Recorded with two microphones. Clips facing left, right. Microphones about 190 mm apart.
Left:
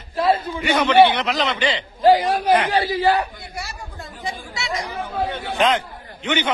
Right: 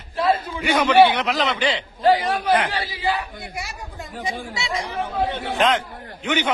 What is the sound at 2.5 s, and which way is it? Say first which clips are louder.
Speech: left 2 dB; 5° left (ahead or behind).